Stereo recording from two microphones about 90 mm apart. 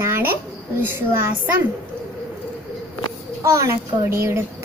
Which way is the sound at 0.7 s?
25° right (ahead or behind).